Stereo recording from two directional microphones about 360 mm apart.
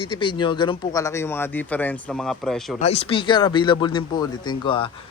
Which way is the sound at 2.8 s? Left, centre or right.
Centre.